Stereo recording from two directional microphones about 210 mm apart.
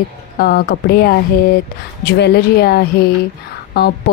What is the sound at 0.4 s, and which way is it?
A woman's voice, 45° left (ahead or behind).